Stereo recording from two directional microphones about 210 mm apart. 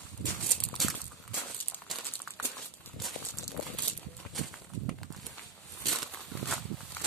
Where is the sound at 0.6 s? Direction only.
Centre (ahead or behind).